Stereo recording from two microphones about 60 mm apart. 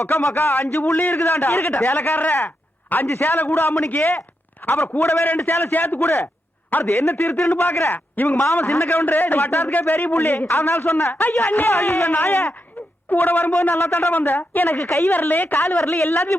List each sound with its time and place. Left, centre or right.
0.3 s a man's voice: left
3.8 s a man's voice: left
6.0 s a man's voice: left
7.9 s a man's voice: left
10.2 s a man's voice: left
11.1 s a man's voice: left
11.7 s a man's voice: left
13.6 s a man's voice: left
14.8 s a man's voice: left
15.1 s a man's voice: left
15.8 s a man's voice: left